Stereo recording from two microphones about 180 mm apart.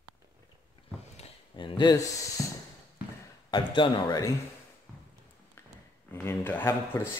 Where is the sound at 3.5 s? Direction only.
25° left (ahead or behind).